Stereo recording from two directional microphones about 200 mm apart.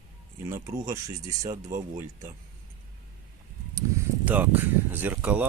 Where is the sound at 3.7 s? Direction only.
10° right (ahead or behind).